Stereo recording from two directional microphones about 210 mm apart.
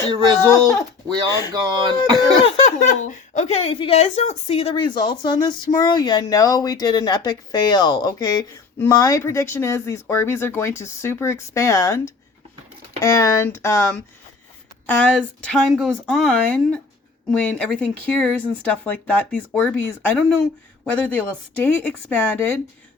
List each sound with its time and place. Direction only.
0.5 s speech: 10° left (ahead or behind)
1.1 s speech: 25° right (ahead or behind)
2.4 s a woman's voice: 30° left (ahead or behind); by 22.5 s 10° left (ahead or behind)